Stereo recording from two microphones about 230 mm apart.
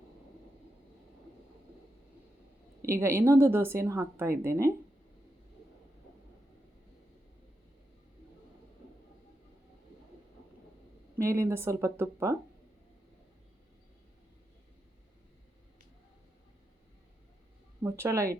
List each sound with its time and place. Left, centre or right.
2.8 s speech: centre
11.2 s speech: centre
17.8 s speech: centre